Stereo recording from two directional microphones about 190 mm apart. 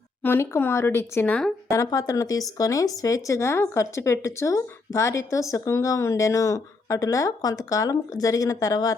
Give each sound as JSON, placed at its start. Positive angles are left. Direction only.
{"t": 0.2, "sound": "speech", "side_deg": 10}
{"t": 1.7, "sound": "speech", "side_deg": 15}